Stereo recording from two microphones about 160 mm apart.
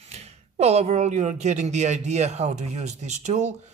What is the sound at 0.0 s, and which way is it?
Speech, 45° right (ahead or behind).